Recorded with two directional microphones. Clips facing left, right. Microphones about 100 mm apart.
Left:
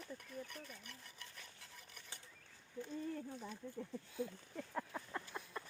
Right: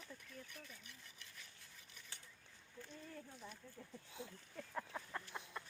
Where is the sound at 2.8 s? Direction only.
20° left (ahead or behind).